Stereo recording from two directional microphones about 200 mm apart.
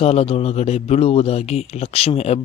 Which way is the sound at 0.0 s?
30° left (ahead or behind).